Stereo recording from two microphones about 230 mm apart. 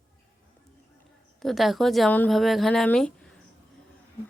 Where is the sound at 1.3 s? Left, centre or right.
Centre.